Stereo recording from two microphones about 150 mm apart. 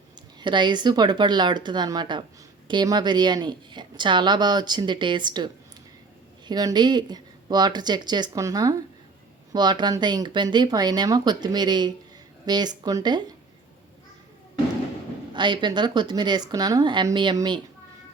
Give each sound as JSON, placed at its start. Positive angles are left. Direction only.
{"t": 0.3, "sound": "a woman's voice", "side_deg": -30}
{"t": 6.5, "sound": "speech", "side_deg": -25}
{"t": 15.3, "sound": "speech", "side_deg": -30}